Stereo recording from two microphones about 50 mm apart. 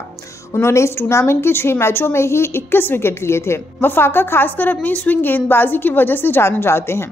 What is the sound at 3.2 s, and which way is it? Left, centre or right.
A woman's voice, left.